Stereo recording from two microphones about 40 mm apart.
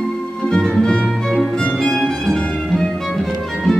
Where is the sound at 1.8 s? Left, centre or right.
Centre.